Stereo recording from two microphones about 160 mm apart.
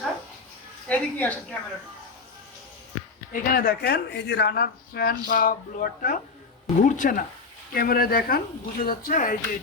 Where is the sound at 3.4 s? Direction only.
65° left (ahead or behind).